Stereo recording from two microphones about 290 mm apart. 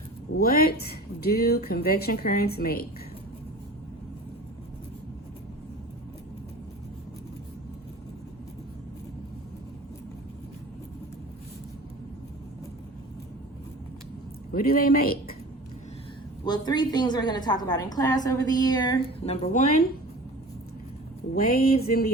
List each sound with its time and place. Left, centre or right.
0.3 s a woman's voice: left
14.5 s a woman's voice: left
16.5 s a woman's voice: centre
21.3 s a woman's voice: left